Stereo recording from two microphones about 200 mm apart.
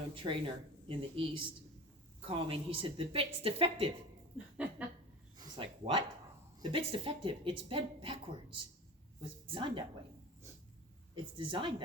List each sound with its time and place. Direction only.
0.1 s a woman's voice: 25° right (ahead or behind)
4.5 s a sound: 5° right (ahead or behind)
5.4 s a sound: 25° right (ahead or behind)
6.6 s a woman's voice: 25° right (ahead or behind)
9.2 s a woman's voice: 25° right (ahead or behind)
11.1 s a woman's voice: 25° right (ahead or behind)